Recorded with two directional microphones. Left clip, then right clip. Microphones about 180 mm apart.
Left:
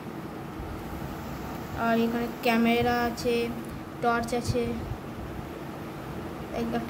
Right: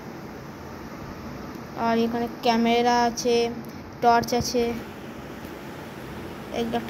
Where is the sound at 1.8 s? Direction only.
25° right (ahead or behind).